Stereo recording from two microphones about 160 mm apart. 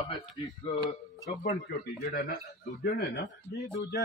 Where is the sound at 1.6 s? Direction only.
70° left (ahead or behind).